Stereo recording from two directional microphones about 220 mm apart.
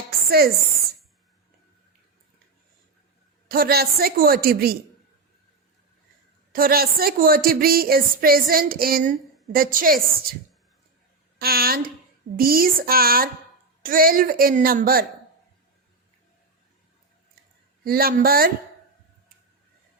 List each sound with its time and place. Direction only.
0.3 s a woman's voice: 45° right (ahead or behind)
3.5 s a woman's voice: 45° right (ahead or behind)
6.5 s a woman's voice: 40° right (ahead or behind)
11.3 s a woman's voice: 45° right (ahead or behind)
17.8 s a woman's voice: 40° right (ahead or behind)